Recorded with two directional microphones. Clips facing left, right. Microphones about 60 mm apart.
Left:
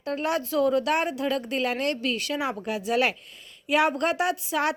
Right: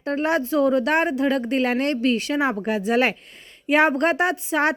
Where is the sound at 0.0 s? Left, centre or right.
Right.